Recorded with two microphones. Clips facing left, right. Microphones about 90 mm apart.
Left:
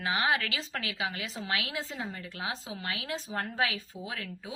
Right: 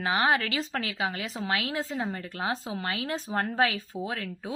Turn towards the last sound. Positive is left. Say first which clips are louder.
# right 6 dB
turn(degrees=-40)  # may be behind; listen again after turning